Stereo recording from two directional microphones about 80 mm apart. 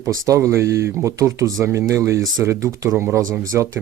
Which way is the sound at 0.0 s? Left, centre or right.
Right.